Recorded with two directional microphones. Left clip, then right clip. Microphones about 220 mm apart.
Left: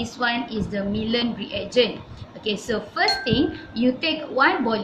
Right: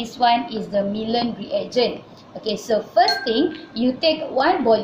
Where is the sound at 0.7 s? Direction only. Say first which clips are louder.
Right 6 dB; 30° left (ahead or behind).